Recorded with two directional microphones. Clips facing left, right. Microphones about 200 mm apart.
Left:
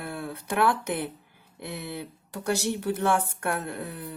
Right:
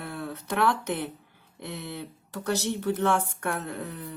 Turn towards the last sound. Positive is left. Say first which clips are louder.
# even
turn(degrees=10)  # may be behind; listen again after turning